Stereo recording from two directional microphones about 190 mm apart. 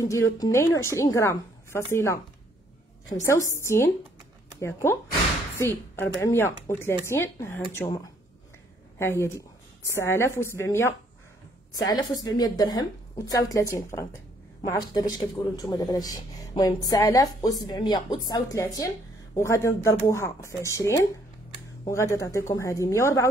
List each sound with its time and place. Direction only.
0.0 s a woman's voice: 15° left (ahead or behind)
8.9 s a woman's voice: 15° left (ahead or behind)